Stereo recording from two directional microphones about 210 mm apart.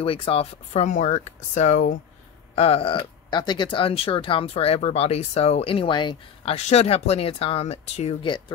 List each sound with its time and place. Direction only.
0.0 s speech: 25° left (ahead or behind)